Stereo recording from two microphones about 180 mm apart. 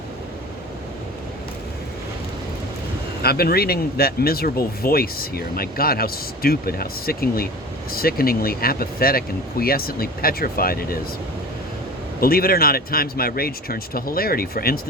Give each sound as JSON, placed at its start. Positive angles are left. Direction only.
{"t": 3.2, "sound": "speech", "side_deg": 60}
{"t": 12.2, "sound": "speech", "side_deg": 55}